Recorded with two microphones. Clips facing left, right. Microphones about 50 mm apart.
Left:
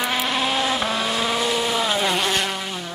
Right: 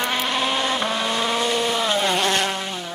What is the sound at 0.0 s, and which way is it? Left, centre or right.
Vehicle, centre.